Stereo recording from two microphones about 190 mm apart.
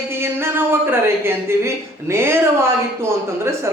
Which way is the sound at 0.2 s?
10° right (ahead or behind).